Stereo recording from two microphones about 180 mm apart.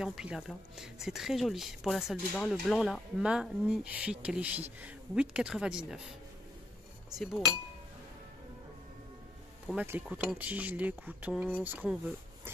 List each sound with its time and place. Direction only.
0.0 s speech: 5° right (ahead or behind)
7.2 s speech: centre (ahead or behind)
9.7 s speech: 10° right (ahead or behind)